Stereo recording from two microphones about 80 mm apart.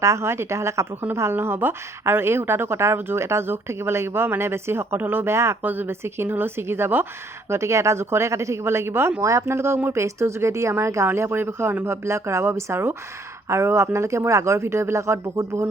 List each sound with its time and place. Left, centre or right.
0.0 s a woman's voice: right